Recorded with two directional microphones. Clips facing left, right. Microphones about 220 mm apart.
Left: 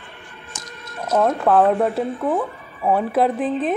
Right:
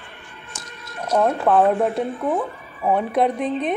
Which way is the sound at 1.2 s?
5° right (ahead or behind).